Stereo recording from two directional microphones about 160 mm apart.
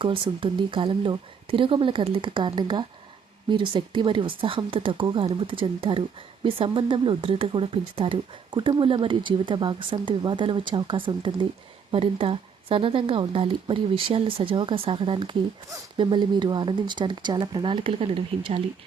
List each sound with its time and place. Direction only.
0.0 s speech: 35° right (ahead or behind)